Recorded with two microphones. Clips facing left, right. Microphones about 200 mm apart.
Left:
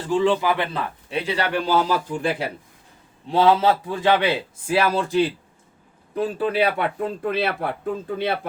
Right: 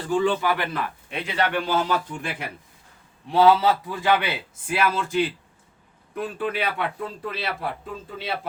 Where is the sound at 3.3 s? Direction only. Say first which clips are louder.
Even; 25° left (ahead or behind).